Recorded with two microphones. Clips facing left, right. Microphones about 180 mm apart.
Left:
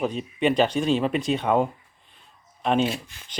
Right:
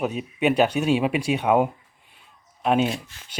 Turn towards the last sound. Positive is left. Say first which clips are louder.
# right 1 dB
turn(degrees=0)  # may be behind; listen again after turning